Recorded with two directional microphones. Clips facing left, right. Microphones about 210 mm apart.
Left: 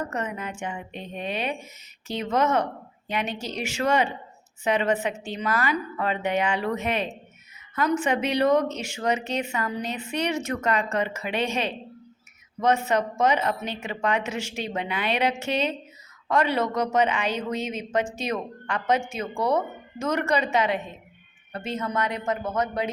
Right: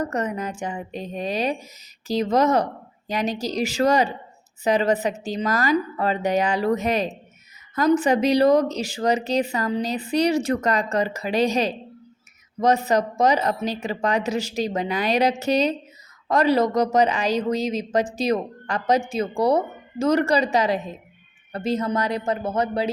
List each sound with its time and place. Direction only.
0.0 s a woman's voice: 40° right (ahead or behind)